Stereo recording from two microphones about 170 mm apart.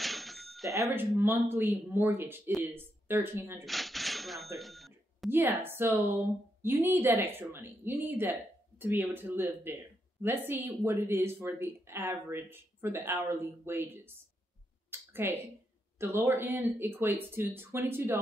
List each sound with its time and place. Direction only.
0.0 s a sound: centre (ahead or behind)
0.7 s speech: 20° right (ahead or behind)
3.6 s cash register: centre (ahead or behind)
5.3 s speech: 15° right (ahead or behind)
14.9 s a sound: 15° right (ahead or behind)
16.0 s speech: 15° right (ahead or behind)